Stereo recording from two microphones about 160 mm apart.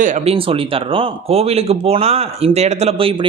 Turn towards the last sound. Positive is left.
turn(degrees=-35)  # may be behind; listen again after turning